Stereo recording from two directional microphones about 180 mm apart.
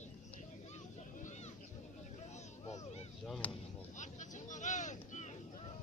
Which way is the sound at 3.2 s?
Centre (ahead or behind).